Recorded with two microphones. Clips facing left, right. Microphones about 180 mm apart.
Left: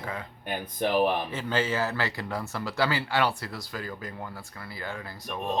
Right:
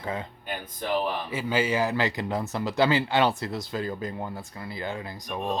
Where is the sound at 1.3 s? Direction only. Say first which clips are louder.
Right 2 dB; 10° right (ahead or behind).